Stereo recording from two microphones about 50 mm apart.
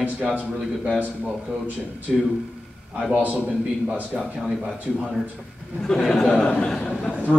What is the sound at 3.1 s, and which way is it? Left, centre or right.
A man's voice, right.